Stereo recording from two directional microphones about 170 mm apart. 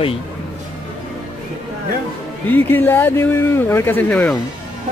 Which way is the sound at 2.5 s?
10° left (ahead or behind).